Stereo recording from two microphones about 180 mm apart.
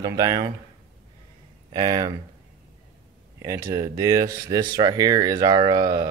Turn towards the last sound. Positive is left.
turn(degrees=-20)  # may be behind; listen again after turning